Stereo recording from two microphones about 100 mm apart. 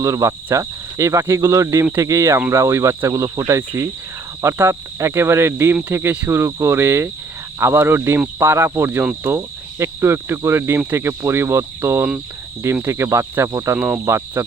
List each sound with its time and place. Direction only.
0.0 s speech: 30° right (ahead or behind)
13.7 s speech: 10° right (ahead or behind)
14.0 s speech: 30° right (ahead or behind)